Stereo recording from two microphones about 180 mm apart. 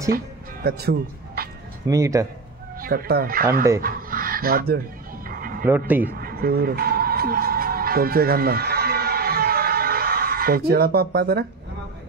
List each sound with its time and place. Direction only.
0.7 s speech: 60° right (ahead or behind)
1.9 s speech: 15° right (ahead or behind)
2.8 s speech: 55° right (ahead or behind)
3.8 s a sound: 55° right (ahead or behind)
5.7 s speech: 10° right (ahead or behind)
6.0 s music: 55° right (ahead or behind)